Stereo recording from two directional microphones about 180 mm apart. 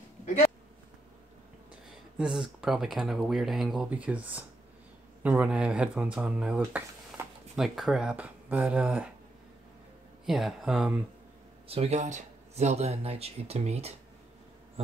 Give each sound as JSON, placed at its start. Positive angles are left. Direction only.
{"t": 0.2, "sound": "a sound", "side_deg": 40}
{"t": 2.1, "sound": "speech", "side_deg": -5}
{"t": 10.2, "sound": "speech", "side_deg": 0}
{"t": 11.6, "sound": "speech", "side_deg": -35}